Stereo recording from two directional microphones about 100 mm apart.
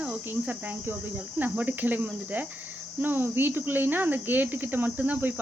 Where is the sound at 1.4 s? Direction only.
15° right (ahead or behind).